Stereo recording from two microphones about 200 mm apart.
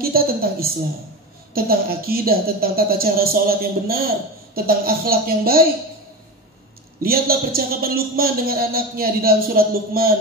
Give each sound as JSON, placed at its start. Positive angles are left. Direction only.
{"t": 0.0, "sound": "a woman's voice", "side_deg": -50}
{"t": 7.0, "sound": "speech", "side_deg": -50}